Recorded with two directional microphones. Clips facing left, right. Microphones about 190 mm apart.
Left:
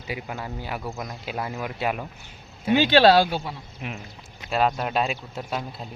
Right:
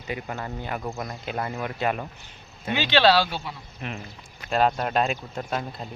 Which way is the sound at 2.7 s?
45° left (ahead or behind).